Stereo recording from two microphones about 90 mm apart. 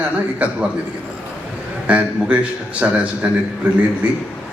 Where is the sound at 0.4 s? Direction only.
15° right (ahead or behind).